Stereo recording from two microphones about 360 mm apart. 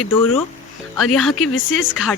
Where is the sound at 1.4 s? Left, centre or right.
Left.